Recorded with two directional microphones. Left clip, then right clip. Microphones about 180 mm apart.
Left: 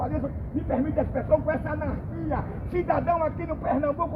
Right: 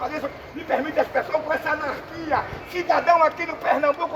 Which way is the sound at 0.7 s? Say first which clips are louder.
Right 5 dB; 15° right (ahead or behind).